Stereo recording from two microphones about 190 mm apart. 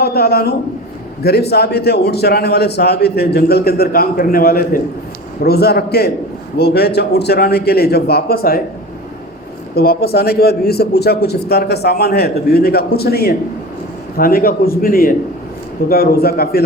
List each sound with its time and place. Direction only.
0.0 s a man's voice: 55° left (ahead or behind)
9.7 s a man's voice: 55° left (ahead or behind)